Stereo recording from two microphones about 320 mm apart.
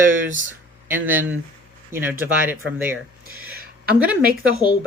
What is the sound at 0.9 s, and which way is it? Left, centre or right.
Speech, centre.